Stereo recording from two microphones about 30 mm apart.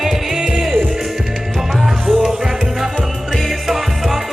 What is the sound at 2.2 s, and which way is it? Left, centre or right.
Music, right.